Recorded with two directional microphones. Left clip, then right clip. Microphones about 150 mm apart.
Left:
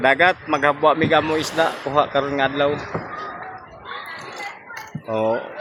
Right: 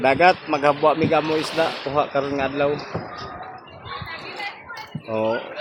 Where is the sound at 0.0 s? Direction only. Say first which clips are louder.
Even; 5° left (ahead or behind).